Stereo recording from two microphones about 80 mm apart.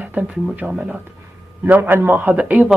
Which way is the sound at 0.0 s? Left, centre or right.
Centre.